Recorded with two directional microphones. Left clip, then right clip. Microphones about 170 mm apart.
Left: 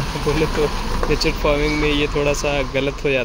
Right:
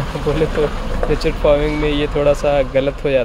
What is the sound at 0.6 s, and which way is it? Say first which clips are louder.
A man's voice: right 2 dB; 15° right (ahead or behind).